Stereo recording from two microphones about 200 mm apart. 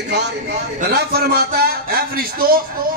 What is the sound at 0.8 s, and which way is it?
A man's voice, 50° right (ahead or behind).